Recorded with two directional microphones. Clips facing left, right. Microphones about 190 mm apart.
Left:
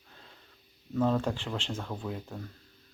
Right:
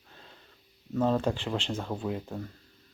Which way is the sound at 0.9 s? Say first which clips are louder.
Right 1 dB; 15° right (ahead or behind).